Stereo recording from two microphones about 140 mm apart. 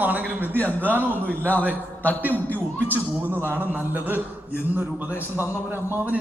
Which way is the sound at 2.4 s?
15° left (ahead or behind).